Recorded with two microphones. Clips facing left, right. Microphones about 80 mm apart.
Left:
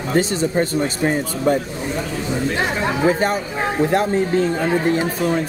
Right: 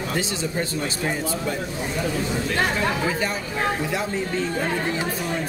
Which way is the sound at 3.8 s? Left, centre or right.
Left.